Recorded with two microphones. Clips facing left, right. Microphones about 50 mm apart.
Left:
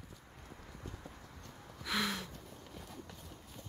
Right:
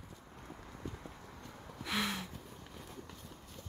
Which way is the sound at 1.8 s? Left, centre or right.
Centre.